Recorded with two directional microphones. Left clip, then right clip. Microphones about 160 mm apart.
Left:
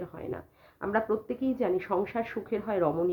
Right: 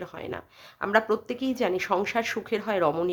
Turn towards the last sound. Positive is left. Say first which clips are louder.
# right 3 dB
turn(degrees=-25)  # may be behind; listen again after turning